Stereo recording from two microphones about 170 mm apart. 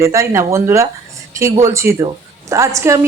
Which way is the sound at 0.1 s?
15° right (ahead or behind).